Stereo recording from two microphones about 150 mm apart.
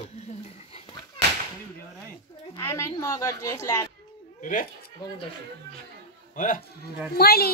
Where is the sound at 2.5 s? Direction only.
20° left (ahead or behind).